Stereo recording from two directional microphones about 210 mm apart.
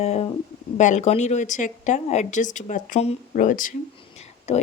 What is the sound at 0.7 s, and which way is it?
Speech, 35° left (ahead or behind).